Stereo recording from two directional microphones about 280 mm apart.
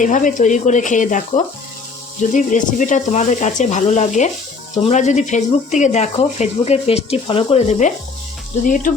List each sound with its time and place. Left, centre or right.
0.0 s speech: left